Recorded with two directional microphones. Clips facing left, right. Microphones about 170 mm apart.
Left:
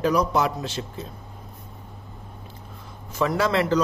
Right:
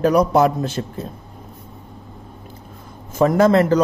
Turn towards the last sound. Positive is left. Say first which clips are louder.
# right 8 dB
turn(degrees=-50)  # may be behind; listen again after turning